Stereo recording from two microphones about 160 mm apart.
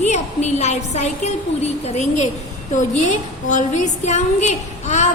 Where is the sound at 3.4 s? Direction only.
50° left (ahead or behind).